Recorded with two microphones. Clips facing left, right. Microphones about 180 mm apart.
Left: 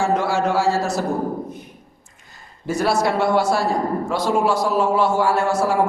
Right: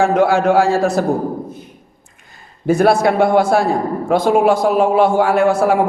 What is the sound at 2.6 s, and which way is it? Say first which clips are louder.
A man's voice: right 7 dB; 55° right (ahead or behind).